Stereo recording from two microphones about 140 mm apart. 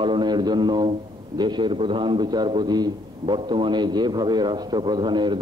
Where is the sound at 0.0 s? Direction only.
35° right (ahead or behind).